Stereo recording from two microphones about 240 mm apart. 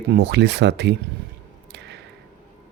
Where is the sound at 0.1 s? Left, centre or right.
Right.